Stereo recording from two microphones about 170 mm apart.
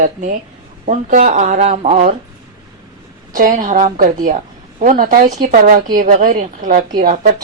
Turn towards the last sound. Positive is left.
turn(degrees=-50)  # may be behind; listen again after turning